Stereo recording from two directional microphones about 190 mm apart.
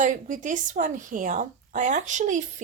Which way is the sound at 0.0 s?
45° right (ahead or behind).